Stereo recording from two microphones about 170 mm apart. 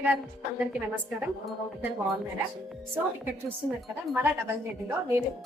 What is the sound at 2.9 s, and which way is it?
Speech, 10° right (ahead or behind).